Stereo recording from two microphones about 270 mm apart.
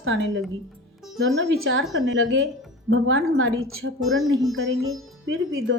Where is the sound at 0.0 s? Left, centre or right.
Right.